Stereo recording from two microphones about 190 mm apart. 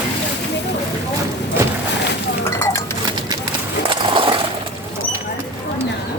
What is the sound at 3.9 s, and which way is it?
Skateboard, 25° right (ahead or behind).